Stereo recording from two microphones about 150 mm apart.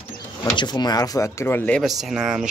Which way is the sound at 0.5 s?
30° left (ahead or behind).